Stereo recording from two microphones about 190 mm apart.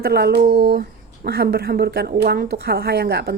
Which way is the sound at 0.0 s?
60° right (ahead or behind).